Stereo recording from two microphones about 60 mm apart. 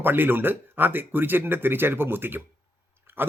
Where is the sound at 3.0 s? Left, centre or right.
Right.